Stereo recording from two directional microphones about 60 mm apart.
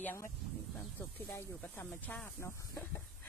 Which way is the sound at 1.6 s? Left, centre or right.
Left.